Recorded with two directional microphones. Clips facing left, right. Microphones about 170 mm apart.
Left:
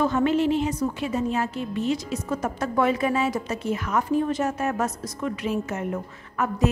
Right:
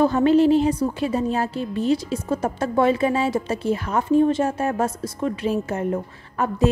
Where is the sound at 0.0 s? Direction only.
35° right (ahead or behind).